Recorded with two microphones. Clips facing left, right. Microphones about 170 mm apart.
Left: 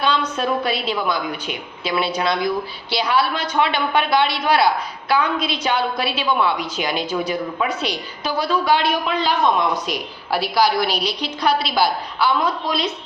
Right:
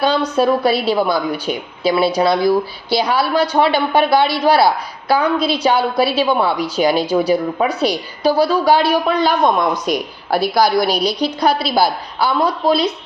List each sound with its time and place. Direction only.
0.0 s a woman's voice: 35° right (ahead or behind)